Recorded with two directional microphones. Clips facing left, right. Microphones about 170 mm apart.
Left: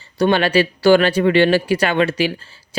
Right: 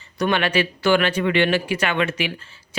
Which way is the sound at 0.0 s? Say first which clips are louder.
Left 5 dB; 30° left (ahead or behind).